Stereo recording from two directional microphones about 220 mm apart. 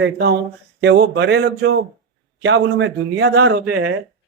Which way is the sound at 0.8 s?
55° right (ahead or behind).